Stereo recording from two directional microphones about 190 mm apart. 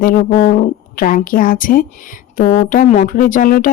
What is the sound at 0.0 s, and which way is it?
Speech, 50° left (ahead or behind).